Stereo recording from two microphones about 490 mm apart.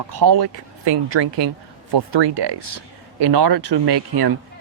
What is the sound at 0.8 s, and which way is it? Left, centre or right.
Speech, right.